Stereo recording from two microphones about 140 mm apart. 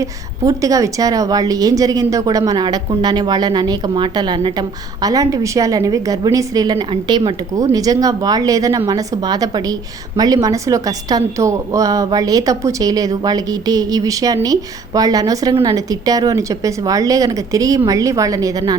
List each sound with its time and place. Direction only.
0.0 s a woman's voice: 25° right (ahead or behind)